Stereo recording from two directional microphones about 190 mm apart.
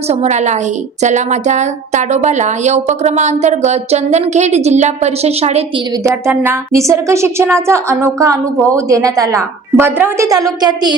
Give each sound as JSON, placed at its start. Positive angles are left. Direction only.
{"t": 0.1, "sound": "a woman's voice", "side_deg": -35}
{"t": 6.0, "sound": "speech", "side_deg": -15}